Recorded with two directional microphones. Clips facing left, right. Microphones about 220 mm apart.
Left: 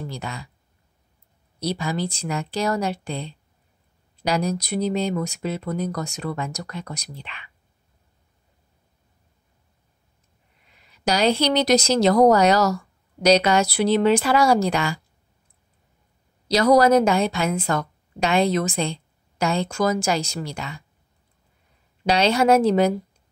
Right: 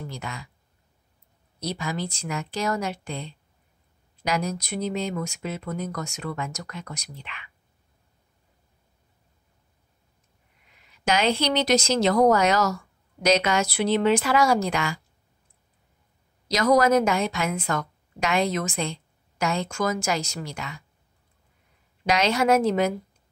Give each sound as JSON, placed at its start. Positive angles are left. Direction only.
{"t": 0.0, "sound": "a woman's voice", "side_deg": 35}
{"t": 1.6, "sound": "a woman's voice", "side_deg": 35}
{"t": 11.1, "sound": "a woman's voice", "side_deg": 35}
{"t": 16.4, "sound": "a woman's voice", "side_deg": 35}
{"t": 22.0, "sound": "a woman's voice", "side_deg": 30}